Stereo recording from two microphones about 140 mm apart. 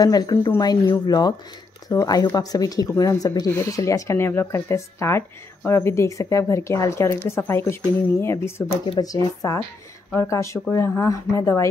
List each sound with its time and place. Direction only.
0.0 s speech: 30° left (ahead or behind)